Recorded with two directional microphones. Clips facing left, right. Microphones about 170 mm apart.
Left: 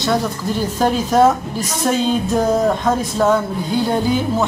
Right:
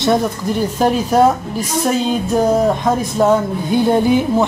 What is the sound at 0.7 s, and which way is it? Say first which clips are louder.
A woman's voice: right 1 dB; 10° right (ahead or behind).